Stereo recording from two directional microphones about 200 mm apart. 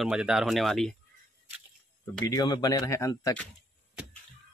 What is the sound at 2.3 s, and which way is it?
Speech, 20° left (ahead or behind).